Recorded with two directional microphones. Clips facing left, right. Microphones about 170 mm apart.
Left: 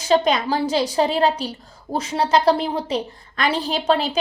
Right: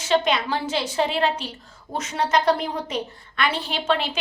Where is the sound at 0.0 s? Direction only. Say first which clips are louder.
Left 3 dB; 40° left (ahead or behind).